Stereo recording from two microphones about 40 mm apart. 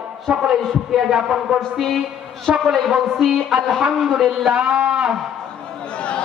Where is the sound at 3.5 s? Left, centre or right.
Centre.